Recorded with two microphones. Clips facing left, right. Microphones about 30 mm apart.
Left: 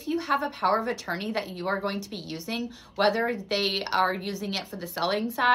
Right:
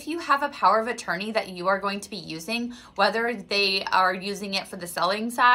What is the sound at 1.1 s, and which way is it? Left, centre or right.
Speech, right.